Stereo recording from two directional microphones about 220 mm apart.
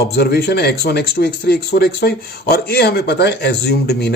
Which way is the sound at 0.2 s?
50° left (ahead or behind).